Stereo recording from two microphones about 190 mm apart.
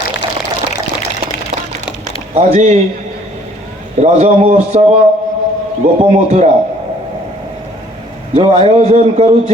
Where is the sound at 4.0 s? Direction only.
35° right (ahead or behind).